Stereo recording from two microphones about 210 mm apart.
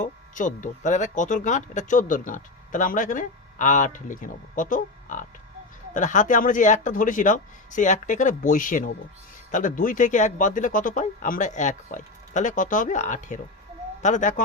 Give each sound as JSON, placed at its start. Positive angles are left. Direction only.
{"t": 0.0, "sound": "speech", "side_deg": 40}